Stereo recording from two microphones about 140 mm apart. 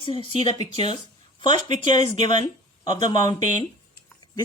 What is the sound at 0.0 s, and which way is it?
Speech, 40° left (ahead or behind).